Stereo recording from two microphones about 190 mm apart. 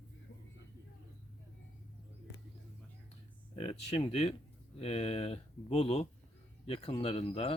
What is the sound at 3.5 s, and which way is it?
Speech, 30° left (ahead or behind).